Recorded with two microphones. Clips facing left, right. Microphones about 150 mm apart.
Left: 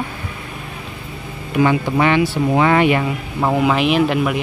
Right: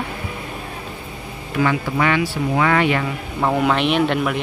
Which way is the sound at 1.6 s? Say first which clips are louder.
Left 4 dB; 20° left (ahead or behind).